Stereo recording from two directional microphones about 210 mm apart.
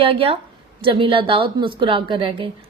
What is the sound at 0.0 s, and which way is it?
A woman's voice, 25° right (ahead or behind).